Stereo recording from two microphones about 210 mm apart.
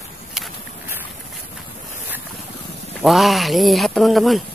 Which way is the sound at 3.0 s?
Centre (ahead or behind).